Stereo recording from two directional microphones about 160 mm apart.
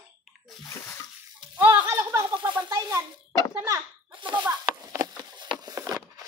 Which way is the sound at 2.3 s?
30° right (ahead or behind).